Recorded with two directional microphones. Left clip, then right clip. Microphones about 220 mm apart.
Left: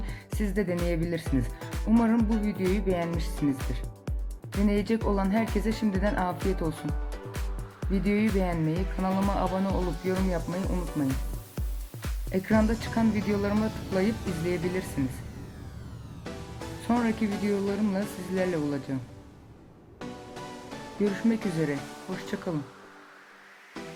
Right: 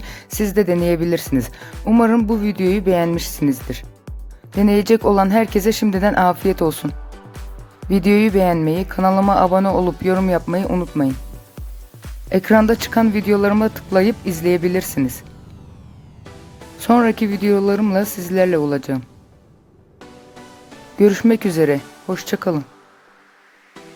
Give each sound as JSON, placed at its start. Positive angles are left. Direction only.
{"t": 0.0, "sound": "music", "side_deg": -50}
{"t": 0.3, "sound": "speech", "side_deg": -50}
{"t": 7.9, "sound": "speech", "side_deg": -50}
{"t": 12.3, "sound": "speech", "side_deg": -50}
{"t": 16.8, "sound": "speech", "side_deg": -50}
{"t": 21.0, "sound": "speech", "side_deg": -50}